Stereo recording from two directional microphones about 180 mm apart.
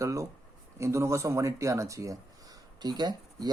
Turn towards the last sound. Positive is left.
turn(degrees=-25)  # may be behind; listen again after turning